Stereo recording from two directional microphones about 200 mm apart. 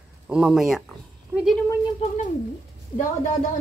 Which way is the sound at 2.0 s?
30° left (ahead or behind).